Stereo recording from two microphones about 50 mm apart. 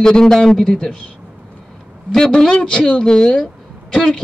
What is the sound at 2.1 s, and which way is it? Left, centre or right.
Speech, centre.